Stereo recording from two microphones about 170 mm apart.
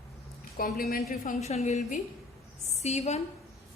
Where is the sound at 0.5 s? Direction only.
60° left (ahead or behind).